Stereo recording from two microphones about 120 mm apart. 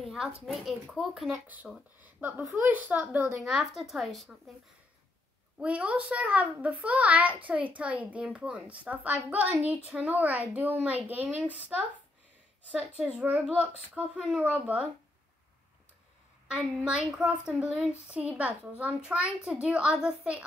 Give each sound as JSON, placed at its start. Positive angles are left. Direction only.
{"t": 0.0, "sound": "a sound", "side_deg": 0}
{"t": 0.8, "sound": "a woman's voice", "side_deg": 0}
{"t": 2.0, "sound": "a child's voice", "side_deg": -15}
{"t": 3.4, "sound": "a woman's voice", "side_deg": -5}
{"t": 5.6, "sound": "a child's voice", "side_deg": -10}
{"t": 12.7, "sound": "a child's voice", "side_deg": -5}
{"t": 16.4, "sound": "a child's voice", "side_deg": -10}